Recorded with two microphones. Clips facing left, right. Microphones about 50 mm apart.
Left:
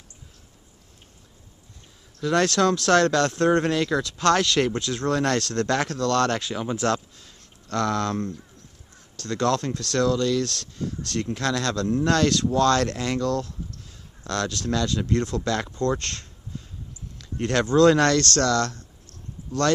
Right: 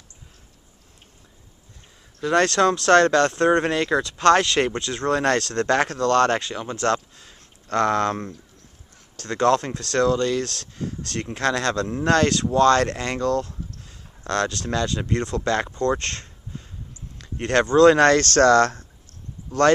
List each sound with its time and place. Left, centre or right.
2.2 s speech: centre
7.2 s speech: centre
15.7 s speech: centre
16.0 s a sound: centre
17.7 s speech: centre